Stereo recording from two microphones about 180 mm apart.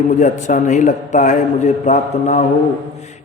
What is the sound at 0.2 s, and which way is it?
A man's voice, 40° left (ahead or behind).